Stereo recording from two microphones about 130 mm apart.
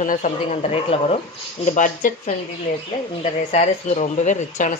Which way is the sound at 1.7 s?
75° left (ahead or behind).